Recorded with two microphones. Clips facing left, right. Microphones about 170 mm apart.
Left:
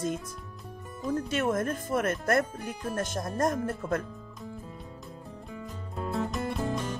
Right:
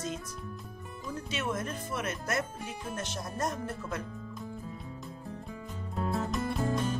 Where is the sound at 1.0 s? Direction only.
50° left (ahead or behind).